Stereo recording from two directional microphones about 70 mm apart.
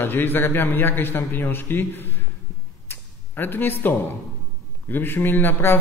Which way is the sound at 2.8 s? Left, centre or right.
Left.